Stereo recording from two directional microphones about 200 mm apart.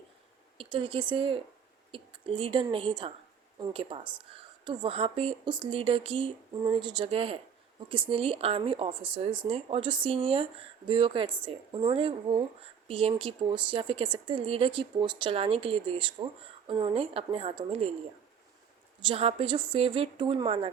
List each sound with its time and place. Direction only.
0.6 s a woman's voice: 25° right (ahead or behind)
19.0 s a woman's voice: 30° right (ahead or behind)